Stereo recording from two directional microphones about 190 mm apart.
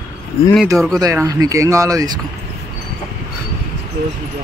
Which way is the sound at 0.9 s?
20° right (ahead or behind).